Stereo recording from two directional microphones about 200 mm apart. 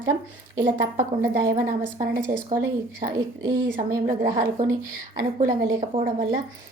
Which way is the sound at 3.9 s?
15° right (ahead or behind).